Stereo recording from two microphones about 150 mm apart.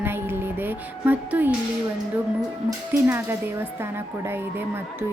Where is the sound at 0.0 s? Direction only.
15° right (ahead or behind).